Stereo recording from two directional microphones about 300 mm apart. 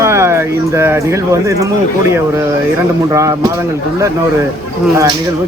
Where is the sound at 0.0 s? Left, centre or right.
Centre.